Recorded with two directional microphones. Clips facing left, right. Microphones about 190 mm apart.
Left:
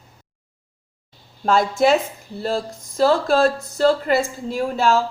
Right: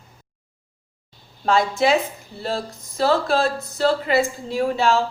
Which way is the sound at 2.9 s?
45° left (ahead or behind).